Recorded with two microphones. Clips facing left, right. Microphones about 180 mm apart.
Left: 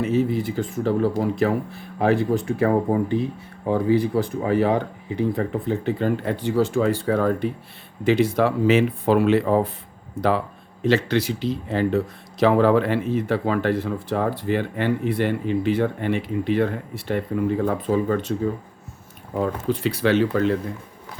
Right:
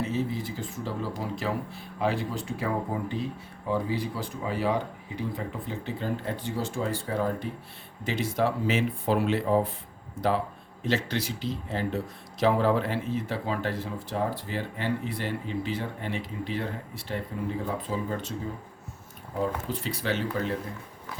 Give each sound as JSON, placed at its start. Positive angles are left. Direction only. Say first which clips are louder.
{"t": 0.0, "sound": "speech", "louder": "left 8 dB", "side_deg": 65}
{"t": 19.3, "sound": "speech", "louder": "left 6 dB", "side_deg": 75}